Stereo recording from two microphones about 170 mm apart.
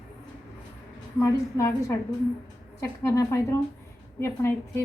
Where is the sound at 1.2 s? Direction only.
15° left (ahead or behind).